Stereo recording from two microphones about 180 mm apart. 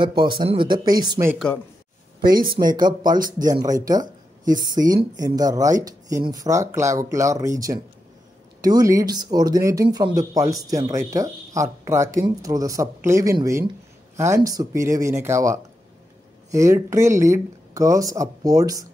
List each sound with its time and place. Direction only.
0.2 s speech: 25° right (ahead or behind)
2.3 s speech: 25° right (ahead or behind)
3.2 s speech: 50° right (ahead or behind)
4.6 s speech: 20° right (ahead or behind)